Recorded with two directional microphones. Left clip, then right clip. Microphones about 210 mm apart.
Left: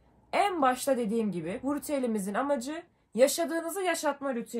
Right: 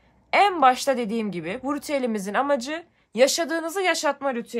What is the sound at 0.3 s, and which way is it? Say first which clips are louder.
A woman's voice: right 8 dB; 25° right (ahead or behind).